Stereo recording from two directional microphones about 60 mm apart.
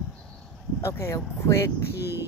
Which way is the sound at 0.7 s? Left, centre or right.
Left.